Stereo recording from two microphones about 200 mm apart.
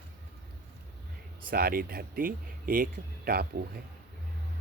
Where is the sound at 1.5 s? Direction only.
50° right (ahead or behind).